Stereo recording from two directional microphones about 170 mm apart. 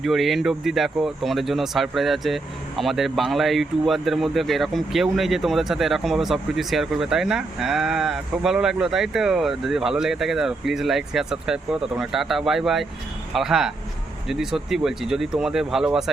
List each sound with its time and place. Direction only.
0.0 s speech: centre (ahead or behind)